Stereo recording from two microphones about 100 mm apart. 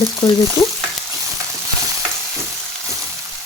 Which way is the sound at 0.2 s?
40° left (ahead or behind).